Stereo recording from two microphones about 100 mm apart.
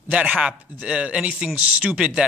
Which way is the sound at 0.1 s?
10° right (ahead or behind).